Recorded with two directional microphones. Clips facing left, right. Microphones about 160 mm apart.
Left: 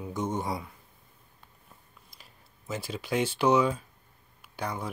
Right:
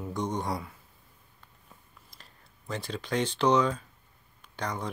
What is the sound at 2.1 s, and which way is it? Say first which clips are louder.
Speech: even; 5° left (ahead or behind).